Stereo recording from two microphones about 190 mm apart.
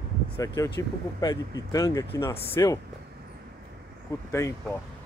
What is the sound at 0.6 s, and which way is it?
Speech, 20° left (ahead or behind).